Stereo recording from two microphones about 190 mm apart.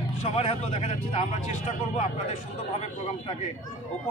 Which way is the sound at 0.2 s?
30° left (ahead or behind).